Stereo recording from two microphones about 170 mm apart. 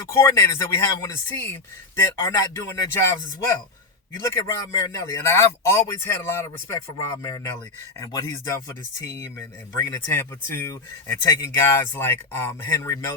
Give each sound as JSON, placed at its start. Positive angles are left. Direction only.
{"t": 0.1, "sound": "speech", "side_deg": 15}
{"t": 4.2, "sound": "speech", "side_deg": 15}
{"t": 9.7, "sound": "speech", "side_deg": 20}